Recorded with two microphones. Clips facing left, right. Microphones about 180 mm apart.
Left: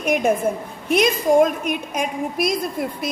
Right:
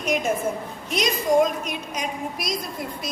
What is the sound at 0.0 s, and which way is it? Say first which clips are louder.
A woman's voice: left 5 dB; 55° left (ahead or behind).